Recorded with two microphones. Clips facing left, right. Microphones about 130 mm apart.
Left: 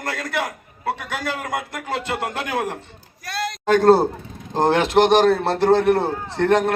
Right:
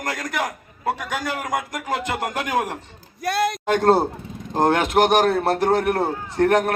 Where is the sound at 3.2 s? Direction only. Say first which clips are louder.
Right 6 dB; 55° right (ahead or behind).